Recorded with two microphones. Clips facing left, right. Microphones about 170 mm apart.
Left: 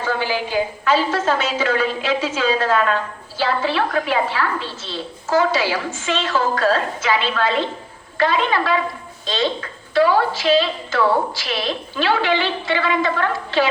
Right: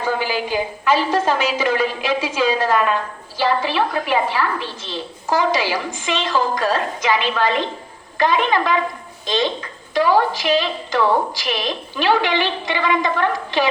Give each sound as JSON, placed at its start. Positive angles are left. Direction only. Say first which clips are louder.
{"t": 0.0, "sound": "a woman's voice", "louder": "right 1 dB", "side_deg": -15}